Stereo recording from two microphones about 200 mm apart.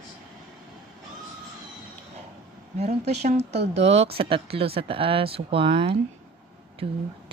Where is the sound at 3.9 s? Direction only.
30° right (ahead or behind).